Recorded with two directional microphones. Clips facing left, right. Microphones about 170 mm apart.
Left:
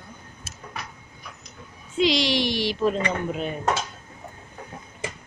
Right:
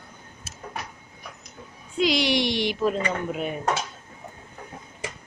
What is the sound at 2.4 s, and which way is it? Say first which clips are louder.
Speech: even; 20° right (ahead or behind).